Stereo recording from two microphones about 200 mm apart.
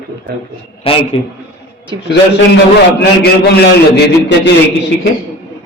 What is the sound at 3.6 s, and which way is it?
Speech, 55° left (ahead or behind).